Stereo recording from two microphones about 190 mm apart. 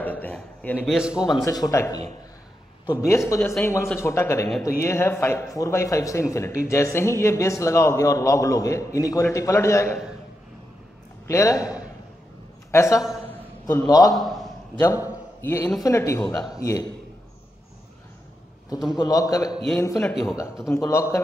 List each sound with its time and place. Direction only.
0.0 s a man's voice: 10° left (ahead or behind)
1.2 s a man's voice: 20° left (ahead or behind)
11.2 s a man's voice: 15° left (ahead or behind)
12.7 s a man's voice: 15° left (ahead or behind)
13.3 s a sound: 10° left (ahead or behind)
13.8 s speech: 20° left (ahead or behind)
14.1 s a sound: centre (ahead or behind)
15.4 s a man's voice: 15° left (ahead or behind)
18.9 s speech: 20° left (ahead or behind)
19.5 s a man's voice: centre (ahead or behind)